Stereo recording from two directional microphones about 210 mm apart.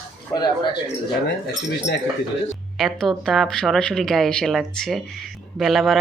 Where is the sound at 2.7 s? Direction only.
Centre (ahead or behind).